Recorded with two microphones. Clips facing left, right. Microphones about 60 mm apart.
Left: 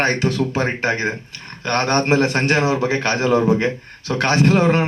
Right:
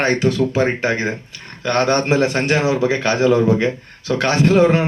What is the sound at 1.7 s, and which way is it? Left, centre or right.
A man's voice, left.